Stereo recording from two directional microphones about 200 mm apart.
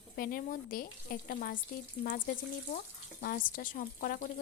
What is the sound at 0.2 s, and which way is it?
Speech, 45° left (ahead or behind).